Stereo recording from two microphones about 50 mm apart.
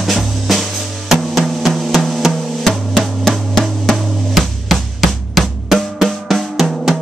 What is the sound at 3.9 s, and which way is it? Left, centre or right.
Drum, centre.